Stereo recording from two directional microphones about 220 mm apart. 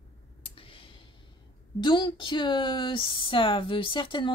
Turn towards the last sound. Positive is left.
turn(degrees=20)  # may be behind; listen again after turning